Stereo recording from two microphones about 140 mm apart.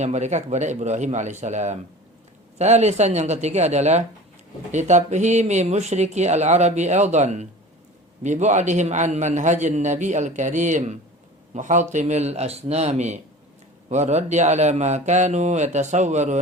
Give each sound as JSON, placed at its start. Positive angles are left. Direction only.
{"t": 0.0, "sound": "speech", "side_deg": -55}